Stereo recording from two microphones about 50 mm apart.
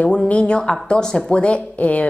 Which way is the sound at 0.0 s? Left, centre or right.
Left.